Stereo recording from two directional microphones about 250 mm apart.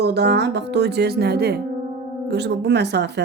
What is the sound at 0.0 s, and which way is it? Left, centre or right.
Speech, right.